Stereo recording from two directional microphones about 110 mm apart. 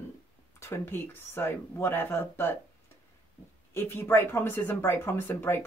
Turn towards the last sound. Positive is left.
turn(degrees=20)  # may be behind; listen again after turning